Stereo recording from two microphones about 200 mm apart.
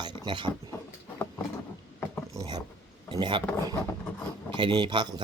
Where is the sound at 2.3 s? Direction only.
20° right (ahead or behind).